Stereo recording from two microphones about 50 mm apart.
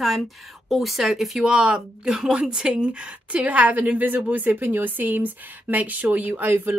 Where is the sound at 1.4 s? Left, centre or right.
Right.